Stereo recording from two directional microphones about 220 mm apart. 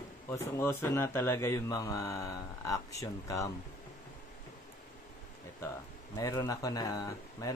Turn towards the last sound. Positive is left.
turn(degrees=15)  # may be behind; listen again after turning